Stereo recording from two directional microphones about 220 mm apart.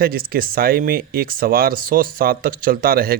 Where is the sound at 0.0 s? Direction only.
40° right (ahead or behind).